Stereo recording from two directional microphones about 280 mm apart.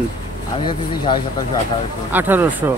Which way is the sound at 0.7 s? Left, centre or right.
Centre.